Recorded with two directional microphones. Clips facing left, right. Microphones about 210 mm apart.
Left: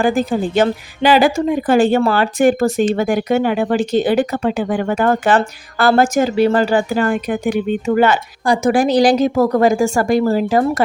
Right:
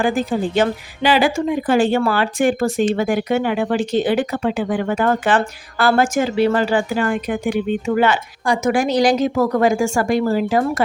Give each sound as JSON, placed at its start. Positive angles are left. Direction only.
{"t": 0.0, "sound": "a woman's voice", "side_deg": 40}